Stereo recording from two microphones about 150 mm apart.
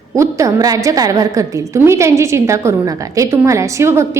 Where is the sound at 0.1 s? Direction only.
20° right (ahead or behind).